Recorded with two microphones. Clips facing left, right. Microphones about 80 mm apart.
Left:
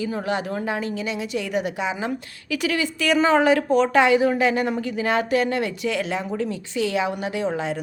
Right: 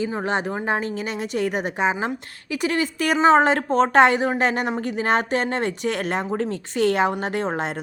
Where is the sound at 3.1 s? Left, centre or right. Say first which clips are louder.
Right 3 dB; right.